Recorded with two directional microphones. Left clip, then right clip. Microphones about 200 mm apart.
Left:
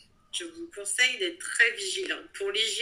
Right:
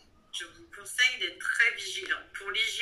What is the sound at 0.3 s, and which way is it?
A woman's voice, 20° left (ahead or behind).